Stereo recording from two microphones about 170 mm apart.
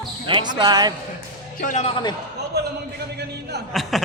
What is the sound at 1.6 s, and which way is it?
Speech, 50° left (ahead or behind).